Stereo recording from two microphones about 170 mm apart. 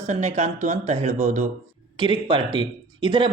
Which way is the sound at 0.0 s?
40° right (ahead or behind).